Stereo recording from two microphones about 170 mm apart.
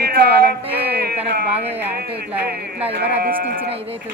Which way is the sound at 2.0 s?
65° right (ahead or behind).